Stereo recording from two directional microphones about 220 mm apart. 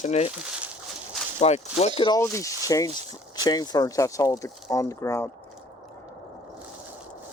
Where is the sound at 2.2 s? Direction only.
15° left (ahead or behind).